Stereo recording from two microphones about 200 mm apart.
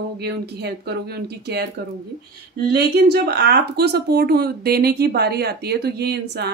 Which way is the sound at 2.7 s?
55° right (ahead or behind).